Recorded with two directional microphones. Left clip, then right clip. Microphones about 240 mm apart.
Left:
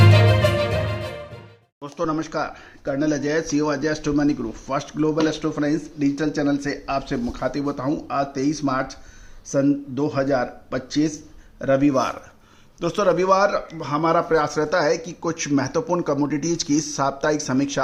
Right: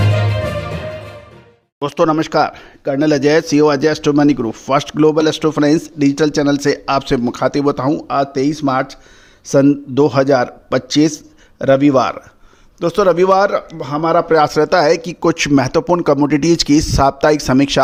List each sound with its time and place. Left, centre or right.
1.8 s speech: right